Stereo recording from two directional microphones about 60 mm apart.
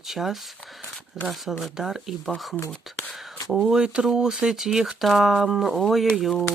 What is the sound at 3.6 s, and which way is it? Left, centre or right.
Speech, centre.